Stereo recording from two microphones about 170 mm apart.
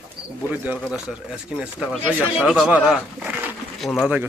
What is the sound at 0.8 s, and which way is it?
Speech, 5° right (ahead or behind).